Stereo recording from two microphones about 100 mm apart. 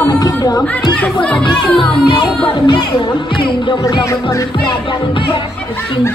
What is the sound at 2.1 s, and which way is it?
Music, 55° left (ahead or behind).